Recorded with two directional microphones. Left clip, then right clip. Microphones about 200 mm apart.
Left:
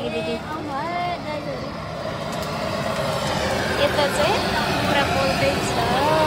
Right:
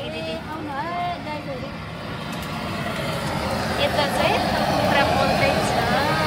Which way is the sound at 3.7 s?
10° left (ahead or behind).